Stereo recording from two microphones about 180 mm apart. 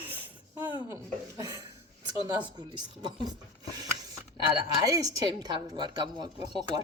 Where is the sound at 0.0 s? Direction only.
10° right (ahead or behind).